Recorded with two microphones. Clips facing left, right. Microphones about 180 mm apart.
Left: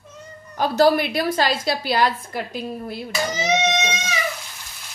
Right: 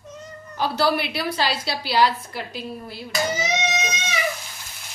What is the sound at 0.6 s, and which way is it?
A woman's voice, 45° left (ahead or behind).